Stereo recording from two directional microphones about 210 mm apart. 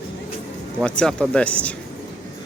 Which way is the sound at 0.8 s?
5° left (ahead or behind).